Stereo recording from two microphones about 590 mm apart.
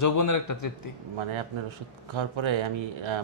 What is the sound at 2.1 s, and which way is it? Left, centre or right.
Speech, right.